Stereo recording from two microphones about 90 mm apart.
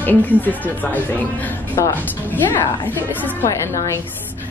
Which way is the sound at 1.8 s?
35° left (ahead or behind).